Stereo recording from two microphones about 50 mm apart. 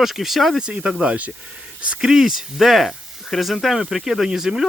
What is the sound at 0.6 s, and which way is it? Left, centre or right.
Speech, right.